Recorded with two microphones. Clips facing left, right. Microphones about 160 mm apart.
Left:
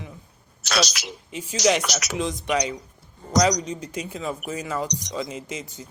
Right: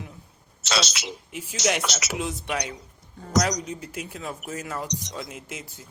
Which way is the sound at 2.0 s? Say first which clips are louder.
Left 3 dB; 10° right (ahead or behind).